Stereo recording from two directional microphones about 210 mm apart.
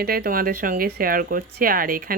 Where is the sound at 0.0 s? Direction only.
45° right (ahead or behind).